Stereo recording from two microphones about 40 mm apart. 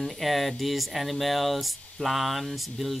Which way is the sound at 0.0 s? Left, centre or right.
Centre.